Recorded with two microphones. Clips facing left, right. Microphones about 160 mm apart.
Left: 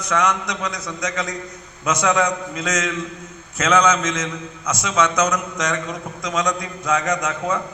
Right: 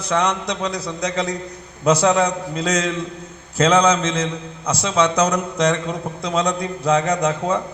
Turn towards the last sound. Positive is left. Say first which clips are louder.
# right 3 dB
turn(degrees=-30)  # may be behind; listen again after turning